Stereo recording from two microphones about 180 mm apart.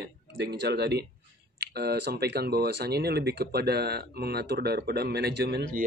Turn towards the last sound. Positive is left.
turn(degrees=-65)  # may be behind; listen again after turning